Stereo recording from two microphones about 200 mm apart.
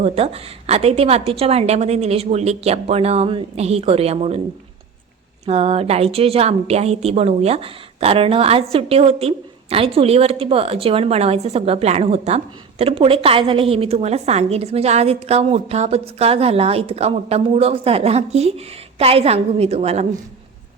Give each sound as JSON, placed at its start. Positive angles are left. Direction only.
{"t": 0.0, "sound": "a woman's voice", "side_deg": -30}
{"t": 5.5, "sound": "a woman's voice", "side_deg": -30}